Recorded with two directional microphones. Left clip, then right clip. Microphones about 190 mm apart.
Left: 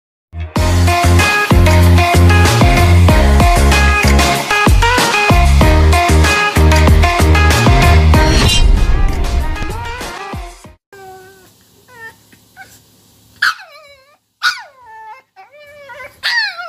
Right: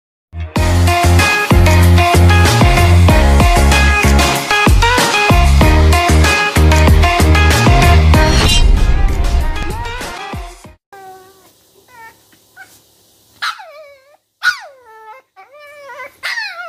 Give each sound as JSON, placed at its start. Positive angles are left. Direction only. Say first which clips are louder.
{"t": 0.3, "sound": "music", "louder": "even", "side_deg": 0}
{"t": 13.4, "sound": "dog", "louder": "left 6 dB", "side_deg": -10}
{"t": 15.6, "sound": "dog", "louder": "right 1 dB", "side_deg": -35}
{"t": 16.2, "sound": "dog", "louder": "left 6 dB", "side_deg": 5}